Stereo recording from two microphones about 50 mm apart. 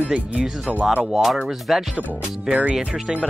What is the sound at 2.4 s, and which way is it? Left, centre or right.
Speech, right.